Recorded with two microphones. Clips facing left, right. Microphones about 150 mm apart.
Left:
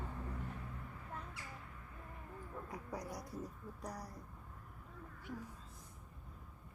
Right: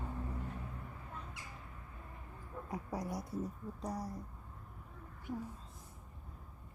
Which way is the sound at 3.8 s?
25° right (ahead or behind).